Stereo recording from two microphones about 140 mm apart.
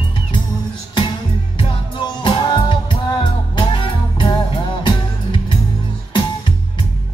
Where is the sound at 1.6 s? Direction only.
35° left (ahead or behind).